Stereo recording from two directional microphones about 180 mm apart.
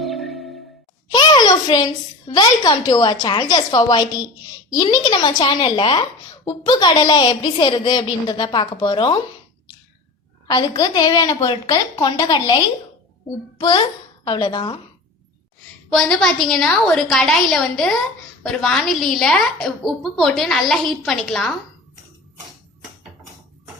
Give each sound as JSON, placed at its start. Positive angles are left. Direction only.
{"t": 0.0, "sound": "music", "side_deg": 0}
{"t": 1.1, "sound": "a child's voice", "side_deg": 25}
{"t": 10.4, "sound": "a woman's voice", "side_deg": 25}
{"t": 15.9, "sound": "a woman's voice", "side_deg": 5}